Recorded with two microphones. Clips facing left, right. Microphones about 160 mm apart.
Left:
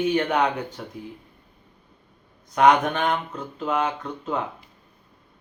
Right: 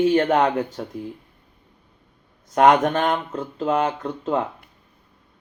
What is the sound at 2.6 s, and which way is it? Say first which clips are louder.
Speech: right 2 dB; 45° right (ahead or behind).